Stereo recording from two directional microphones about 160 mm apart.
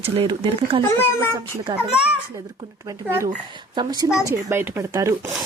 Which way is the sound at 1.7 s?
5° right (ahead or behind).